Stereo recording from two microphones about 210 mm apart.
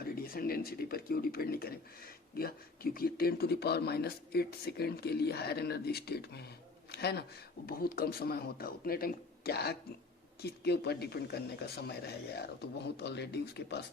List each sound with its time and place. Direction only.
0.0 s speech: 45° left (ahead or behind)